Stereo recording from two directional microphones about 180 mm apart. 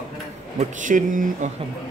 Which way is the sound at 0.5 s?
45° right (ahead or behind).